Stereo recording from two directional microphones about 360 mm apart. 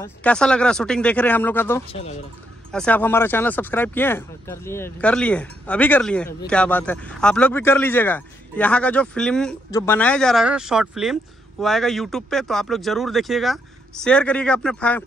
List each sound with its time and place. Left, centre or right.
0.0 s speech: centre